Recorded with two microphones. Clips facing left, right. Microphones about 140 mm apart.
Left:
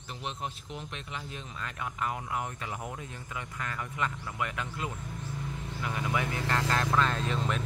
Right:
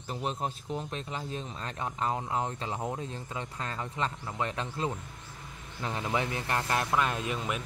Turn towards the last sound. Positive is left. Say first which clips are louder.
# left 1 dB
turn(degrees=-10)  # may be behind; listen again after turning